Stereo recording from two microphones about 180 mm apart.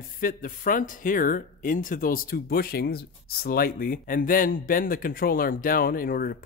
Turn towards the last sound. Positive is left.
turn(degrees=55)  # may be behind; listen again after turning